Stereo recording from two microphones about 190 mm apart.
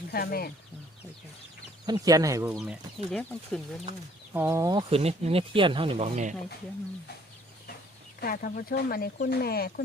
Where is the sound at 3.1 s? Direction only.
5° left (ahead or behind).